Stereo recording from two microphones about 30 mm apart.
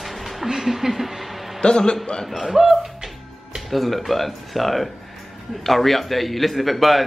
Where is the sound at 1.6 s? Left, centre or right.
Left.